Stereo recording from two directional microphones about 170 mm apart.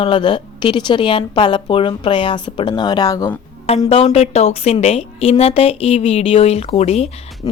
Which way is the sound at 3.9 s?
35° left (ahead or behind).